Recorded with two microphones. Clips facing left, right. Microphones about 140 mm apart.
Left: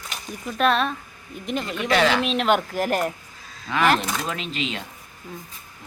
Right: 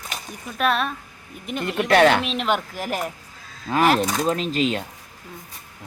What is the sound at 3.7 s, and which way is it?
Speech, 40° right (ahead or behind).